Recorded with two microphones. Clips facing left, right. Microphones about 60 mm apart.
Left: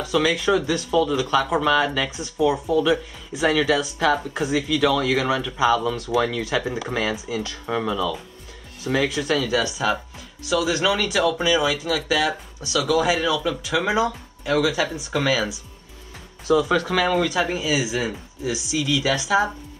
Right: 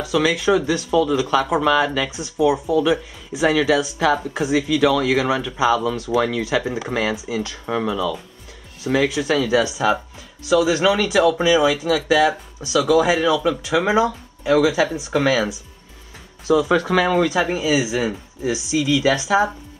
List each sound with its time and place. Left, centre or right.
0.0 s speech: centre
16.6 s speech: right
18.4 s speech: right
18.8 s speech: centre